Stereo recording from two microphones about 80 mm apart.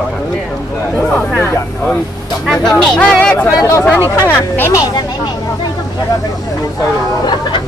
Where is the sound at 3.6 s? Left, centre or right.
Left.